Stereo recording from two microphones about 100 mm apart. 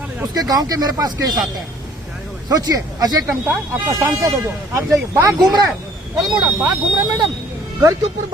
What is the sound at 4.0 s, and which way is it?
Speech, 35° right (ahead or behind).